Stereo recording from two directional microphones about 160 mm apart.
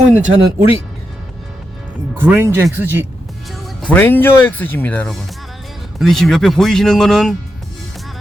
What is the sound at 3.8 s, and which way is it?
Speech, 10° left (ahead or behind).